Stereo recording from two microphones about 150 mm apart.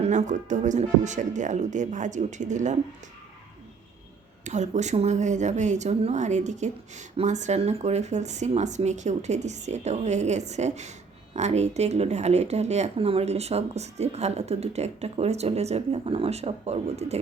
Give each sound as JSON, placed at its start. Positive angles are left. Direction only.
{"t": 0.0, "sound": "speech", "side_deg": -50}
{"t": 4.4, "sound": "speech", "side_deg": -50}